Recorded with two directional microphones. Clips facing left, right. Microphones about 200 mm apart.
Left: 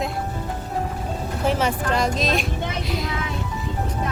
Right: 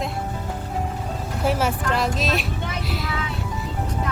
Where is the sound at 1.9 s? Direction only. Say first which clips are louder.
Left 1 dB; 5° right (ahead or behind).